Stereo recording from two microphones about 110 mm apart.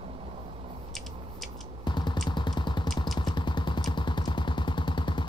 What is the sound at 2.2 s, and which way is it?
Vehicle, 45° left (ahead or behind).